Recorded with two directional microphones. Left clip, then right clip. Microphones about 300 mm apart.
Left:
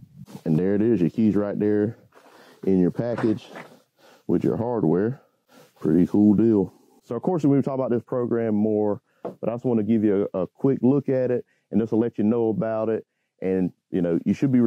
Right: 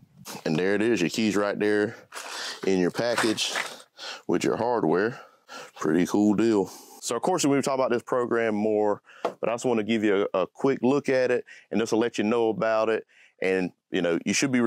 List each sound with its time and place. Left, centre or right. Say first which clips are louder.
0.3 s speech: left 1 dB; centre
5.5 s a sound: left 2 dB; centre
6.3 s speech: left 3 dB; centre